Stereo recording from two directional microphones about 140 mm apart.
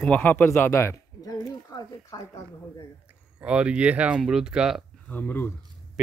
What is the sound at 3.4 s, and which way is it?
Speech, 10° right (ahead or behind).